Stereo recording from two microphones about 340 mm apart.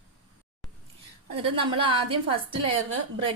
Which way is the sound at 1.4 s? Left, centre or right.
Centre.